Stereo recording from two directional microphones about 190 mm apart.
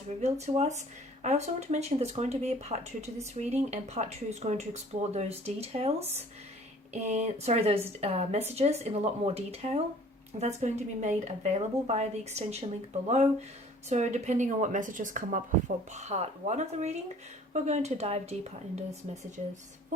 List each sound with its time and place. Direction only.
0.2 s speech: 35° right (ahead or behind)